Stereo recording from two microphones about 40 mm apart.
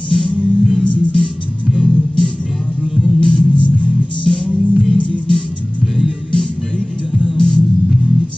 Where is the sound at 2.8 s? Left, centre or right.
Right.